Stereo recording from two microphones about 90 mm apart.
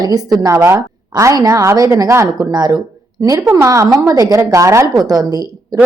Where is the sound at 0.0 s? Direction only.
45° right (ahead or behind).